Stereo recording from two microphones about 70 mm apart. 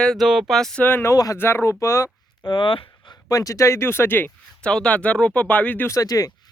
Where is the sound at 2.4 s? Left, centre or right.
Left.